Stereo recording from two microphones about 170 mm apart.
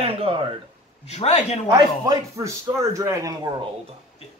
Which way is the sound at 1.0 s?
40° left (ahead or behind).